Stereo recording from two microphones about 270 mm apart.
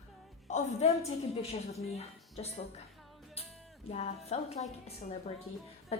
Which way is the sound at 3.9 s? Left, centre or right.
Left.